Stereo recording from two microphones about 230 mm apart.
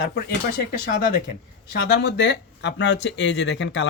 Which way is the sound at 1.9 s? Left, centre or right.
Left.